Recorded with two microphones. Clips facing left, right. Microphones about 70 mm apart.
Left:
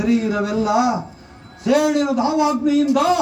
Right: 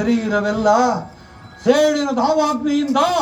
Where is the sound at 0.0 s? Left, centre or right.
Right.